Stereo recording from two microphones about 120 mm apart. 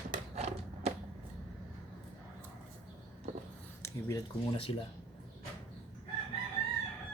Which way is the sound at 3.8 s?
25° left (ahead or behind).